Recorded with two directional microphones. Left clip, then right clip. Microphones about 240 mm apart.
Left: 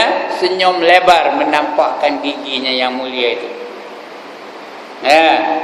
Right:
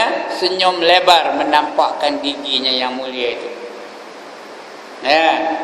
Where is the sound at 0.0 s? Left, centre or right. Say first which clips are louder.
Left 3 dB; centre.